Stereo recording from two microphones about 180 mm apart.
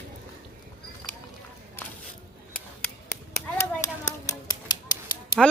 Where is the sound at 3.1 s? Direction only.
15° left (ahead or behind).